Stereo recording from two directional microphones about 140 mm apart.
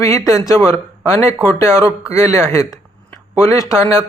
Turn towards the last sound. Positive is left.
turn(degrees=20)  # may be behind; listen again after turning